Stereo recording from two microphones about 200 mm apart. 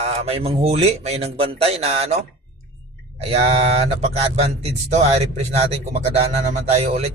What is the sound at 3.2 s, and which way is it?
Speech, 30° right (ahead or behind).